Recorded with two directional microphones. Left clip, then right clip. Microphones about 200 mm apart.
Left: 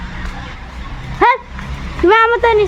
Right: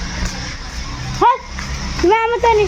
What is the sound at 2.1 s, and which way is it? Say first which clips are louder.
Speech: left 3 dB; 25° left (ahead or behind).